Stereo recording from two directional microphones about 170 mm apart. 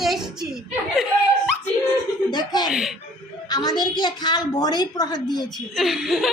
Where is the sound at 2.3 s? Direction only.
25° left (ahead or behind).